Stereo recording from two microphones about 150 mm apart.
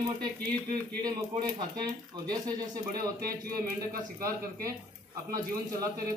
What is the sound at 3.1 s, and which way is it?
Speech, 90° right.